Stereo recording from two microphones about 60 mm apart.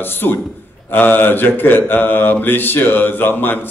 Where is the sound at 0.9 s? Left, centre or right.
Left.